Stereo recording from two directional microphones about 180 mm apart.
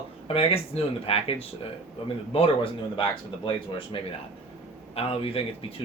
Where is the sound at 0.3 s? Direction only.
35° left (ahead or behind).